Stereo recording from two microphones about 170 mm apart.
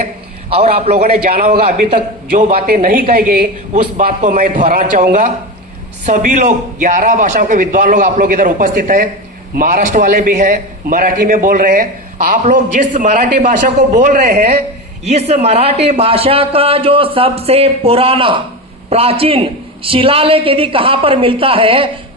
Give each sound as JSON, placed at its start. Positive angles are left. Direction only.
{"t": 0.5, "sound": "a man's voice", "side_deg": -35}
{"t": 0.9, "sound": "a man's voice", "side_deg": -60}
{"t": 3.7, "sound": "a man's voice", "side_deg": -45}